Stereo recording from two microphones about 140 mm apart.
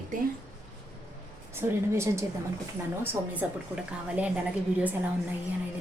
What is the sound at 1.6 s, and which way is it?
Speech, 15° right (ahead or behind).